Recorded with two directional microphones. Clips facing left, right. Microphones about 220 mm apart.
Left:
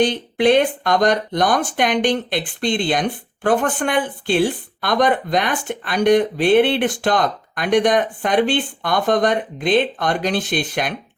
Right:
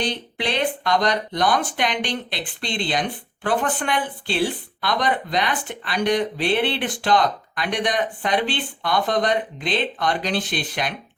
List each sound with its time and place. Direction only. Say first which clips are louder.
0.0 s speech: left 10 dB; 50° left (ahead or behind)